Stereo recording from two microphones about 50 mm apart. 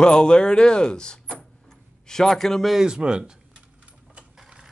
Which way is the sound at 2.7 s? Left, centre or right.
Centre.